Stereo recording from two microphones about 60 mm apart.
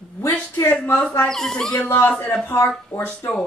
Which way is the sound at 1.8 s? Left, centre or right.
Left.